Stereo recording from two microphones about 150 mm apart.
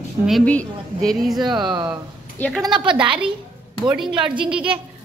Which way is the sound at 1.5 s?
30° right (ahead or behind).